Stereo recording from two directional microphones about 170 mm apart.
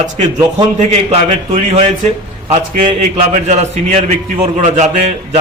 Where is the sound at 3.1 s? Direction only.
40° right (ahead or behind).